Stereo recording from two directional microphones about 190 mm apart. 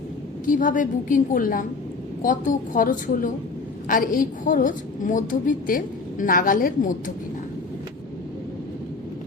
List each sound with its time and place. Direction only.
0.4 s a woman's voice: 45° left (ahead or behind)